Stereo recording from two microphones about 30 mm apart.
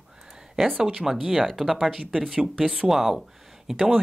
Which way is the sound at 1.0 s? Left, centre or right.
Centre.